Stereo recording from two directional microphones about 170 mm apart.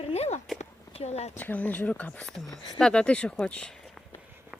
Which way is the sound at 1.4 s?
10° left (ahead or behind).